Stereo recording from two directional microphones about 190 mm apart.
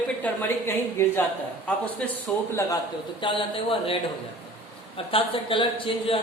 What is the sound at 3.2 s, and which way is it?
Speech, 25° left (ahead or behind).